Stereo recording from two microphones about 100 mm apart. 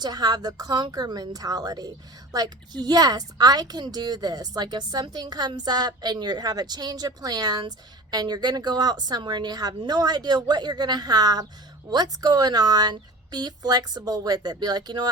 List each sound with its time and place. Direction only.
0.0 s a woman's voice: 40° right (ahead or behind)